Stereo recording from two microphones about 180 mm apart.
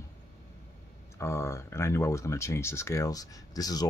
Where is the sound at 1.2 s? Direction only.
15° left (ahead or behind).